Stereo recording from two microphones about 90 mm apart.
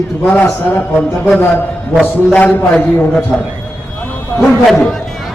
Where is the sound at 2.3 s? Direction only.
20° left (ahead or behind).